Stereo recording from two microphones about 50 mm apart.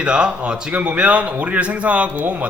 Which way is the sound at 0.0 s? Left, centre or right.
Centre.